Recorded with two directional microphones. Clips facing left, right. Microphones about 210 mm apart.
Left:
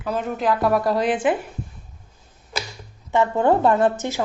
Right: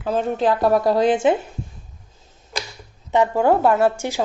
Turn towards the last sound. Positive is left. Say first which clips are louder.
# right 1 dB
turn(degrees=-15)  # may be behind; listen again after turning